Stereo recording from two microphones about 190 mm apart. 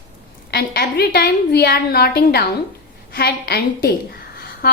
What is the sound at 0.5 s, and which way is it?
A woman's voice, 55° left (ahead or behind).